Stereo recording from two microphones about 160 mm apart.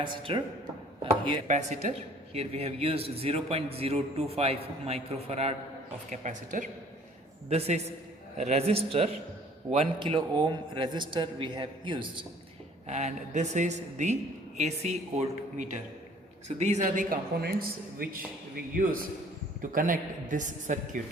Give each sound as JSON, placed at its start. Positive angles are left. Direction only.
{"t": 0.0, "sound": "a man's voice", "side_deg": -30}
{"t": 1.5, "sound": "a man's voice", "side_deg": -45}
{"t": 10.2, "sound": "a man's voice", "side_deg": -30}
{"t": 12.9, "sound": "a man's voice", "side_deg": -45}
{"t": 17.4, "sound": "a man's voice", "side_deg": -70}